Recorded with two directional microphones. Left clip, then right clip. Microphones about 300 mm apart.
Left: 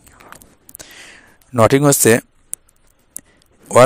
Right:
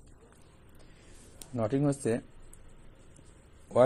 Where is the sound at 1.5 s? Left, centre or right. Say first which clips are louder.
Left 18 dB; left.